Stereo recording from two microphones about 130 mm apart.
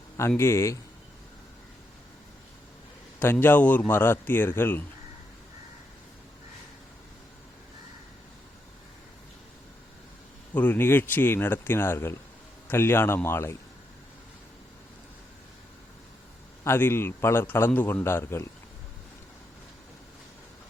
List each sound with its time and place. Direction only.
0.2 s speech: 20° left (ahead or behind)
3.4 s a man's voice: 15° left (ahead or behind)
10.5 s a man's voice: 15° left (ahead or behind)
16.6 s a man's voice: 20° left (ahead or behind)